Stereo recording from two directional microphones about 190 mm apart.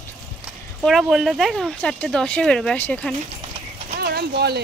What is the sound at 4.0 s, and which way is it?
Speech, 55° right (ahead or behind).